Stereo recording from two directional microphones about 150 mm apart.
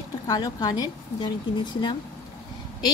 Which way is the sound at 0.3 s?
25° left (ahead or behind).